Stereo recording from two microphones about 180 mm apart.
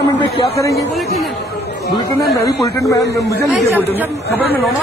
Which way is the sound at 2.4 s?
20° left (ahead or behind).